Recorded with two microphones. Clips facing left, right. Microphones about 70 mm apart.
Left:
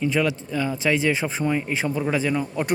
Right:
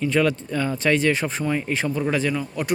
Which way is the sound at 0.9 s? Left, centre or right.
Centre.